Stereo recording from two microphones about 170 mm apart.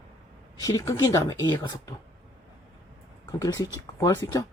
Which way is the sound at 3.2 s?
20° left (ahead or behind).